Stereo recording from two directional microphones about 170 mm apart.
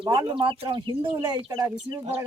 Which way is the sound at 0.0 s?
25° right (ahead or behind).